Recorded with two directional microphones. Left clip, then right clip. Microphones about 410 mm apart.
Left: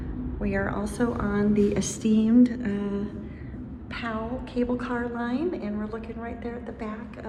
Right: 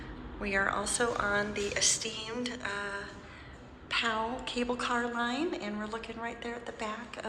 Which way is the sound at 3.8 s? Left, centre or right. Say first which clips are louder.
Right 2 dB; centre.